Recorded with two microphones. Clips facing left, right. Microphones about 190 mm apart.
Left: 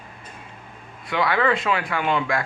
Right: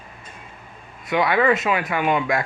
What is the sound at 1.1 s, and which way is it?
Speech, 20° right (ahead or behind).